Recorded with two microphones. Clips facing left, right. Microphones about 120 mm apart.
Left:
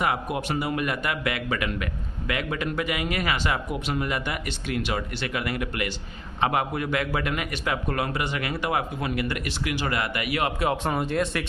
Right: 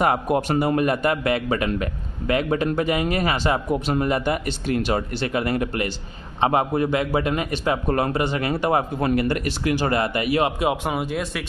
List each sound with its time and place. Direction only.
0.0 s a man's voice: 40° right (ahead or behind)
10.6 s speech: 15° right (ahead or behind)